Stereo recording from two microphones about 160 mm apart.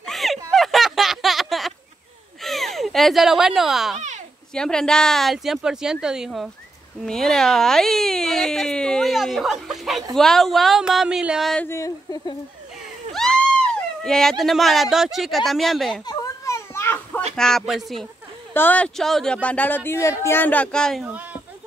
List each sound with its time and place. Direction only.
0.0 s a sound: centre (ahead or behind)
2.4 s speech: centre (ahead or behind)
11.6 s speech: 20° left (ahead or behind)
13.1 s a sound: 5° left (ahead or behind)
14.0 s speech: centre (ahead or behind)
16.1 s children playing: 20° left (ahead or behind)
17.4 s speech: centre (ahead or behind)
18.5 s speech: 10° left (ahead or behind)
21.0 s speech: 10° right (ahead or behind)